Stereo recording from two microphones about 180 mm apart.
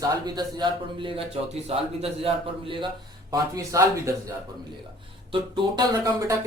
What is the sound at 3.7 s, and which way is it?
Speech, 20° right (ahead or behind).